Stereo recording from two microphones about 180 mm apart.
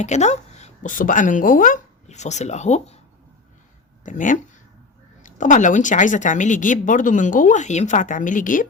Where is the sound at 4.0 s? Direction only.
45° left (ahead or behind).